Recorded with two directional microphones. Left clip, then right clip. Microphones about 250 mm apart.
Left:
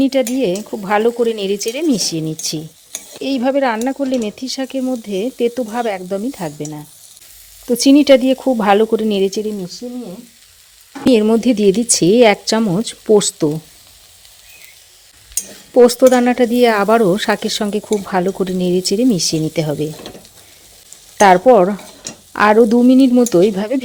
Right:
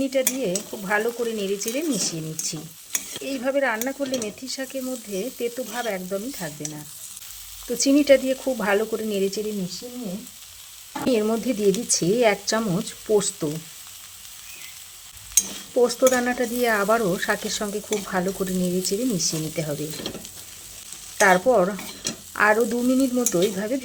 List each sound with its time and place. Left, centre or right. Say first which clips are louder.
0.1 s speech: left 8 dB; left
7.9 s speech: left 6 dB; left
11.0 s speech: left 10 dB; left
15.7 s speech: left 10 dB; left
21.2 s speech: left 9 dB; left